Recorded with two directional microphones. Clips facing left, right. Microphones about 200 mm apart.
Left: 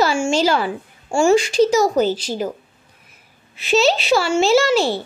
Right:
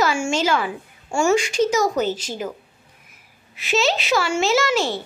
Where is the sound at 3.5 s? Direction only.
30° left (ahead or behind).